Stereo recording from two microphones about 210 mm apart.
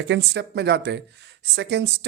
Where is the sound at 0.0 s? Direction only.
55° right (ahead or behind).